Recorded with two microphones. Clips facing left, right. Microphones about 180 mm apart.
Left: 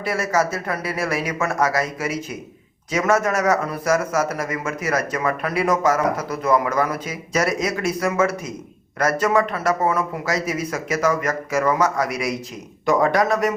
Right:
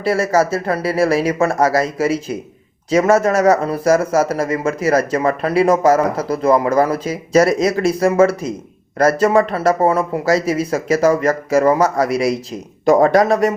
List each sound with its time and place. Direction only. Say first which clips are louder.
0.0 s speech: right 6 dB; 30° right (ahead or behind)